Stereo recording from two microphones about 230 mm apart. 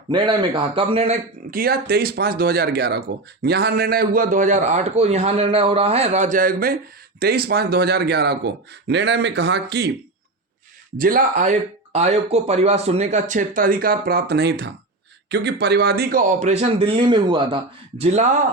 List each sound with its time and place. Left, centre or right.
0.1 s speech: centre
1.5 s a man's voice: right
10.9 s speech: right